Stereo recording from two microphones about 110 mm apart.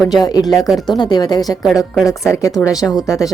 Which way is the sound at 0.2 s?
35° left (ahead or behind).